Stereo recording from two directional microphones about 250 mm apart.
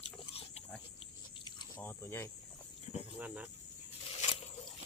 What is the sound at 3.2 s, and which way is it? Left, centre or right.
Cricket, centre.